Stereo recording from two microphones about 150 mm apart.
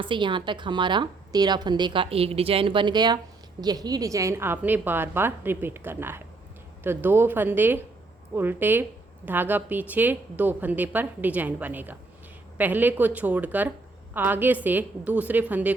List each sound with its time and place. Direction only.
0.0 s a woman's voice: 30° right (ahead or behind); by 15.7 s 10° right (ahead or behind)